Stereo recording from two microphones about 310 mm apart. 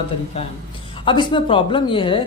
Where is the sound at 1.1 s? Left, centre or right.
Centre.